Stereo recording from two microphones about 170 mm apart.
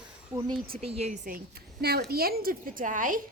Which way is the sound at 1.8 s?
70° right (ahead or behind).